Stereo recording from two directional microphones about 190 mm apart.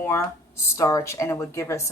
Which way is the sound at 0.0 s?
15° left (ahead or behind).